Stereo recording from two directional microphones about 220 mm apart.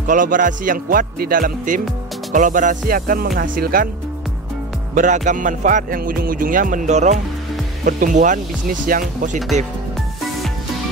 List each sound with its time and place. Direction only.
0.0 s music: 35° right (ahead or behind)
4.9 s music: 35° right (ahead or behind)